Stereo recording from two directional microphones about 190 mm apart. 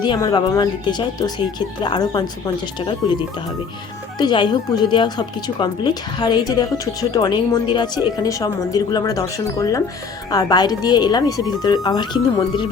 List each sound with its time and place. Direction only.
0.0 s speech: 20° left (ahead or behind)